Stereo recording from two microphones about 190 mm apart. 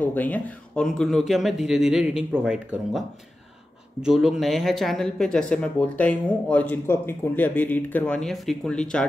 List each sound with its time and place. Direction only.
0.0 s speech: 10° left (ahead or behind)
4.0 s speech: 5° right (ahead or behind)